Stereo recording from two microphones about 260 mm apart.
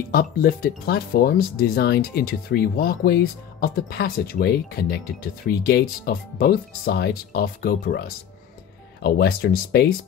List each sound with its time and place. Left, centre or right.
0.1 s speech: left
9.0 s speech: left